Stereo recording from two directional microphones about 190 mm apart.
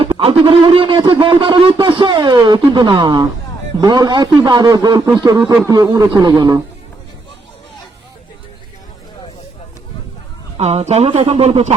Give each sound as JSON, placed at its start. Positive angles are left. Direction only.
{"t": 0.0, "sound": "speech", "side_deg": -30}
{"t": 10.6, "sound": "speech", "side_deg": -35}